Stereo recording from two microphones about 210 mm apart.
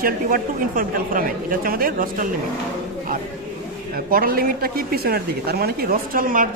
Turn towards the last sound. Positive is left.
turn(degrees=-40)  # may be behind; listen again after turning